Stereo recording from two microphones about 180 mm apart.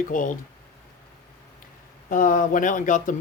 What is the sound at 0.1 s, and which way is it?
Speech, 45° left (ahead or behind).